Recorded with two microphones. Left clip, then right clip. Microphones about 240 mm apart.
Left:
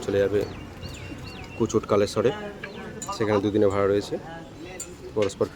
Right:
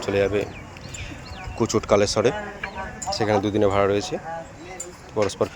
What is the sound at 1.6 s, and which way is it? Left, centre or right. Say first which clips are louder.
Speech: right 3 dB; centre.